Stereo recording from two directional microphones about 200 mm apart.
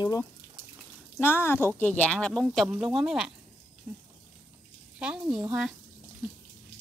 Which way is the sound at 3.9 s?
10° right (ahead or behind).